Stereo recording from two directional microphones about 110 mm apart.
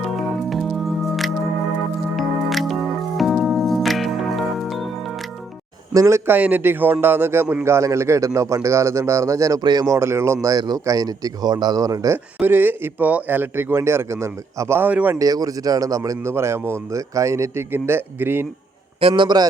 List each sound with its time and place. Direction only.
0.5 s music: centre (ahead or behind)
5.9 s speech: 30° right (ahead or behind)
12.4 s speech: 15° right (ahead or behind)
15.2 s speech: 35° right (ahead or behind); by 18.4 s 20° right (ahead or behind)
18.9 s a man's voice: 50° right (ahead or behind)